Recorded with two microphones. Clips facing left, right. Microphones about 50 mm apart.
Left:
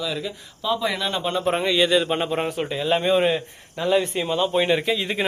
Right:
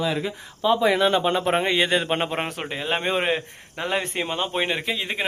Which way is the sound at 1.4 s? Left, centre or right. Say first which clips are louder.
Left 1 dB; right.